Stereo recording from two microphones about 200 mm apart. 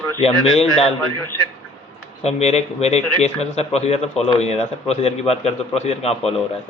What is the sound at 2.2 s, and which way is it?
A man's voice, 35° left (ahead or behind).